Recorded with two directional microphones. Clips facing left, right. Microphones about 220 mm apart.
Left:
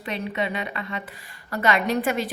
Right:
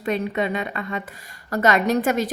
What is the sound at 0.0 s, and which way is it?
A woman's voice, 45° right (ahead or behind).